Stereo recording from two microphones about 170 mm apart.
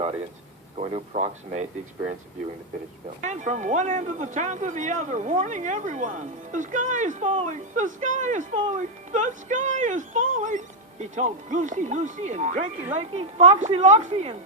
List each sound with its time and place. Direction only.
0.8 s a woman's voice: 35° right (ahead or behind)
3.2 s a woman's voice: 45° right (ahead or behind)